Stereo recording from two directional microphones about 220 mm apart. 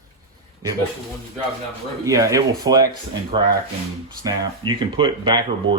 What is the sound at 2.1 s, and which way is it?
Speech, 15° right (ahead or behind).